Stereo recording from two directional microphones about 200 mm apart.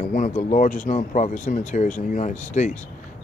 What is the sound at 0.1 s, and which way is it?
Speech, 40° left (ahead or behind).